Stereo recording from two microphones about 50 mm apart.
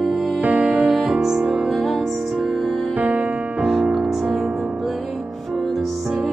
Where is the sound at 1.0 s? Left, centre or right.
Centre.